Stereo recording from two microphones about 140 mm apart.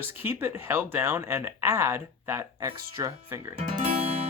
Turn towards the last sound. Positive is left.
turn(degrees=-45)  # may be behind; listen again after turning